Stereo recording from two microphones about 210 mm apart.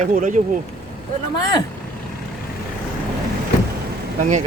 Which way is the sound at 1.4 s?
20° left (ahead or behind).